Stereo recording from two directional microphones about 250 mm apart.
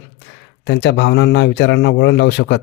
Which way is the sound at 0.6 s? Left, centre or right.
Left.